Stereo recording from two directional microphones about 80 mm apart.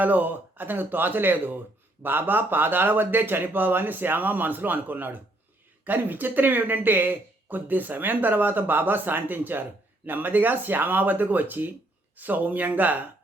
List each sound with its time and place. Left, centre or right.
0.0 s speech: right